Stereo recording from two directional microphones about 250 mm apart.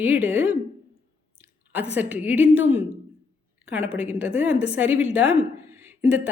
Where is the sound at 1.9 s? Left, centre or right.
Centre.